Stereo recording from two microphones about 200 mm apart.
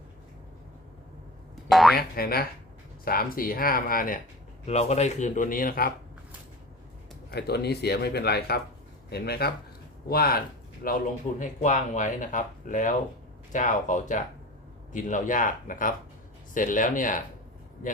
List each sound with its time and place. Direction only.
1.7 s speech: centre (ahead or behind)
2.0 s speech: 50° left (ahead or behind)
4.6 s speech: 35° left (ahead or behind)
7.3 s speech: 55° left (ahead or behind)